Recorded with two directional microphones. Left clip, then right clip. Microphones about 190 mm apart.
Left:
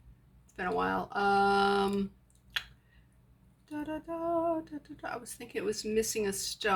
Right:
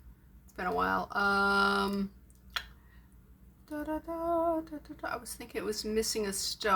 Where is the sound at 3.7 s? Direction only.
25° right (ahead or behind).